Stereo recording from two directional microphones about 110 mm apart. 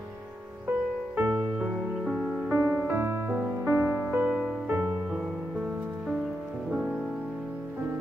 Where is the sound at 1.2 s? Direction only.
20° right (ahead or behind).